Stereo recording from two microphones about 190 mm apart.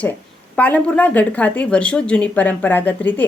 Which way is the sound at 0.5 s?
10° left (ahead or behind).